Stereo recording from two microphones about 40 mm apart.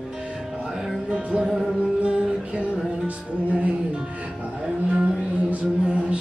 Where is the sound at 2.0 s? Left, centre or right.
Right.